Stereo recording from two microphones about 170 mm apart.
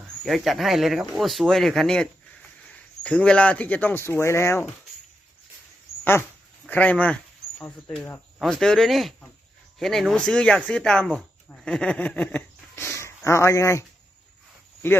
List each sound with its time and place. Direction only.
0.3 s speech: centre (ahead or behind); by 4.6 s 15° left (ahead or behind)
6.7 s speech: 10° left (ahead or behind)